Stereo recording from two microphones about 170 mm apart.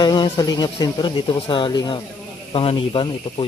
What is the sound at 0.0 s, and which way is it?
Speech, 25° left (ahead or behind).